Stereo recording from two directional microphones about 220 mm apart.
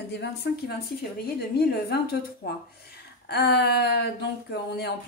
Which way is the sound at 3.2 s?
50° left (ahead or behind).